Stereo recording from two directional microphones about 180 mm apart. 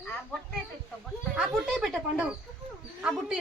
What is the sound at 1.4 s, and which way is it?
Speech, centre (ahead or behind).